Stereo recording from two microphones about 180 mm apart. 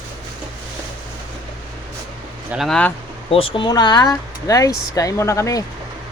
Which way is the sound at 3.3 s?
30° left (ahead or behind).